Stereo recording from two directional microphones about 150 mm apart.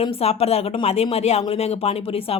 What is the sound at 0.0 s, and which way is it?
Speech, 40° left (ahead or behind).